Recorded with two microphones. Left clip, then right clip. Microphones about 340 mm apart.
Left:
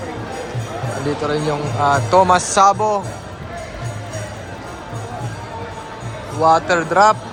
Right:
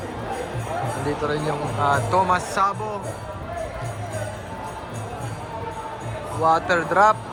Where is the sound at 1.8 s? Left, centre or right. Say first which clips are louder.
Left 6 dB; centre.